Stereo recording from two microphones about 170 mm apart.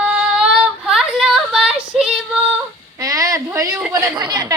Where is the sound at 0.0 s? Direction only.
5° right (ahead or behind).